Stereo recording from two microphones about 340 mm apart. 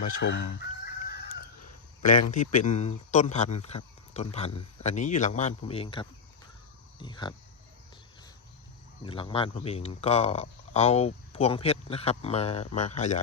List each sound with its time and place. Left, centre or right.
0.0 s chicken: left
2.3 s speech: left
9.0 s speech: centre